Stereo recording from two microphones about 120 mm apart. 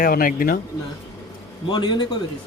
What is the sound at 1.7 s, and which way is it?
Speech, 40° left (ahead or behind).